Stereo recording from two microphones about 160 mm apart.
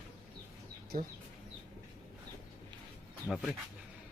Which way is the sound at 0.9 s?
60° right (ahead or behind).